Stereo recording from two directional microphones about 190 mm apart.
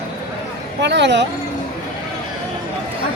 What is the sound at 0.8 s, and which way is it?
Speech, 65° right (ahead or behind).